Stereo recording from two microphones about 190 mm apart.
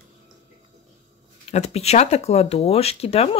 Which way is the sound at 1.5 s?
35° left (ahead or behind).